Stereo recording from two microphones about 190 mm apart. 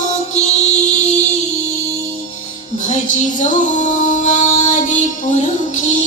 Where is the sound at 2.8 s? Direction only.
40° left (ahead or behind).